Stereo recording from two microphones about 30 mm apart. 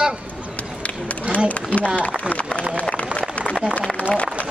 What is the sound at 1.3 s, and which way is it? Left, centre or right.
Speech, left.